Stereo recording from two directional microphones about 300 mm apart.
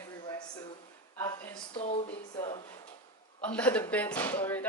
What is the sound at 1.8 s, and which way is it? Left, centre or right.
A woman's voice, centre.